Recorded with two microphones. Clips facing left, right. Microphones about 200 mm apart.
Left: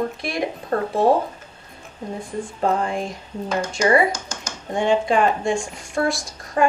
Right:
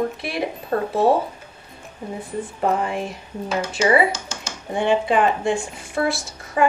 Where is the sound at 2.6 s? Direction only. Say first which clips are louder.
Even; 10° right (ahead or behind).